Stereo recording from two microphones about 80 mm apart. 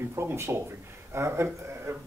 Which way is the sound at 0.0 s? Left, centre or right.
Right.